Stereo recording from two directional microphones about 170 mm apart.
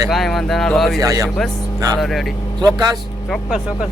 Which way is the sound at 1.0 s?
20° right (ahead or behind).